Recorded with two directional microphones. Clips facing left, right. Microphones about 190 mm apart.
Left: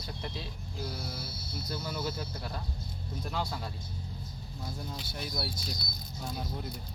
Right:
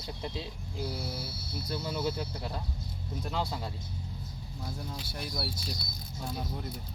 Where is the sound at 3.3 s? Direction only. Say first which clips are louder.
Right 2 dB; 25° right (ahead or behind).